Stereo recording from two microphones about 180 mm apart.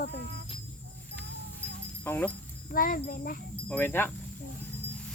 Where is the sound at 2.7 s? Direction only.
50° left (ahead or behind).